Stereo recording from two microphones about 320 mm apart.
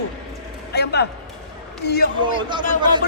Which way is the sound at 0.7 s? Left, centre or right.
Left.